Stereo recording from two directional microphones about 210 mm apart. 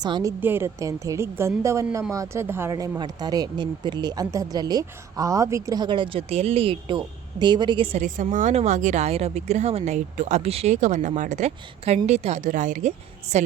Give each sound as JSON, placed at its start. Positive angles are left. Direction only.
{"t": 0.0, "sound": "a woman's voice", "side_deg": -15}